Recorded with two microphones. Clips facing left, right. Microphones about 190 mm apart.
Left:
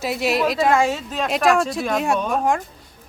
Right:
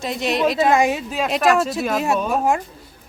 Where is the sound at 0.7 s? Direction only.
15° right (ahead or behind).